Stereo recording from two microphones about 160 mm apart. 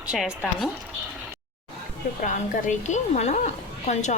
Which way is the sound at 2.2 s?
50° left (ahead or behind).